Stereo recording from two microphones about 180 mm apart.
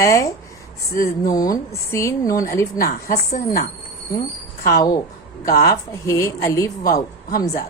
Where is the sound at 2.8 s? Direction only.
55° left (ahead or behind).